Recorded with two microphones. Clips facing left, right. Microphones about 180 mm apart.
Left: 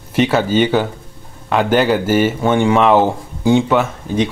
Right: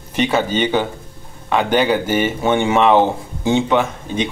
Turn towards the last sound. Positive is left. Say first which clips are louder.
# left 2 dB
turn(degrees=5)  # may be behind; listen again after turning